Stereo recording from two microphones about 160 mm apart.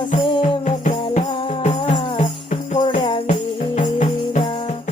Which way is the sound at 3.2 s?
50° left (ahead or behind).